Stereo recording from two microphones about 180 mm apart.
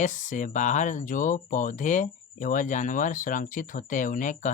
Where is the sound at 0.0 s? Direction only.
45° left (ahead or behind).